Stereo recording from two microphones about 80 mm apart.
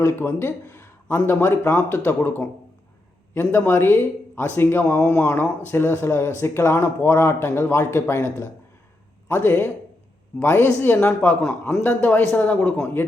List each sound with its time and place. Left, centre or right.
0.0 s speech: left